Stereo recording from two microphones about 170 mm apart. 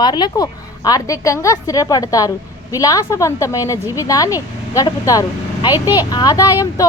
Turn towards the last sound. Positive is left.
turn(degrees=20)  # may be behind; listen again after turning